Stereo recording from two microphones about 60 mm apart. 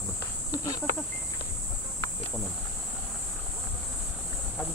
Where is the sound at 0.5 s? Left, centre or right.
Left.